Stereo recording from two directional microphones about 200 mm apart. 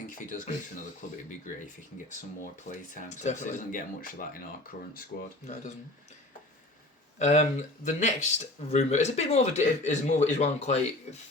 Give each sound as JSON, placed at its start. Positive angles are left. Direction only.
{"t": 0.1, "sound": "speech", "side_deg": 40}
{"t": 2.9, "sound": "speech", "side_deg": 35}
{"t": 7.2, "sound": "speech", "side_deg": 35}